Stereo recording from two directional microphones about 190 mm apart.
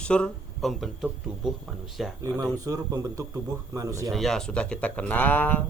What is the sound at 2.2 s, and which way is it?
Speech, 20° right (ahead or behind).